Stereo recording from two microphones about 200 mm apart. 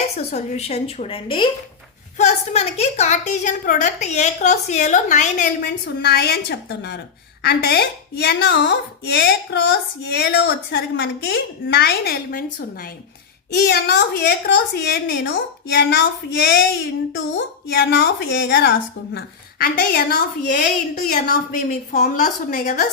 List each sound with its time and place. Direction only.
0.3 s a woman's voice: 35° left (ahead or behind)
5.6 s a woman's voice: 55° left (ahead or behind)